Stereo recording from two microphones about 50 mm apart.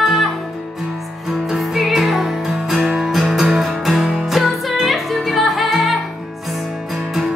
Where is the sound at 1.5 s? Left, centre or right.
Centre.